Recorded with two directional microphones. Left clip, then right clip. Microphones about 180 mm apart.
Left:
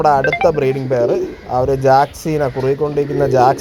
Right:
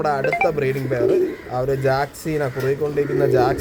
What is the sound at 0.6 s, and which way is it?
A man's voice, 20° left (ahead or behind).